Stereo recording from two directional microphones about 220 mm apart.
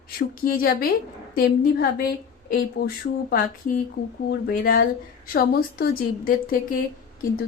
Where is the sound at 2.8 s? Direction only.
40° left (ahead or behind).